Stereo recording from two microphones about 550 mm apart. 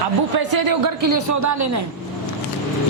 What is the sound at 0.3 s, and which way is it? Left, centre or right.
A man's voice, right.